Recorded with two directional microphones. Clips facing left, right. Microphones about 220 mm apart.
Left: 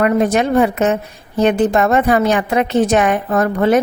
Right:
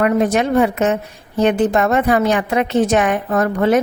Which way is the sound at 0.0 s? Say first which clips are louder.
Left 1 dB; 40° left (ahead or behind).